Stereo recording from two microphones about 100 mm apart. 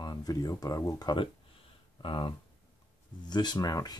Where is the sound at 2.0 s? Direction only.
55° left (ahead or behind).